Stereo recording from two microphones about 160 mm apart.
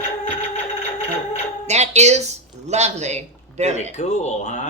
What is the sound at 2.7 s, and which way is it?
A woman's voice, 45° right (ahead or behind).